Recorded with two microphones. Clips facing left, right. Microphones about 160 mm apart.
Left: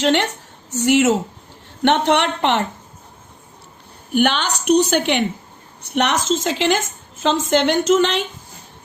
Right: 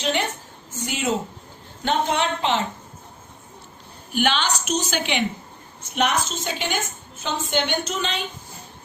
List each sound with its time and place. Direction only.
0.0 s a woman's voice: 90° left
0.7 s a woman's voice: 75° left (ahead or behind)
4.1 s a woman's voice: 55° left (ahead or behind); by 8.2 s 75° left (ahead or behind)